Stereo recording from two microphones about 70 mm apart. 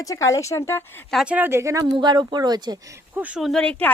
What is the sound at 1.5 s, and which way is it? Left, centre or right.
Speech, right.